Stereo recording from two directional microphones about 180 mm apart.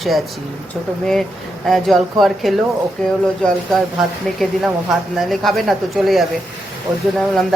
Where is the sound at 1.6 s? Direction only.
Centre (ahead or behind).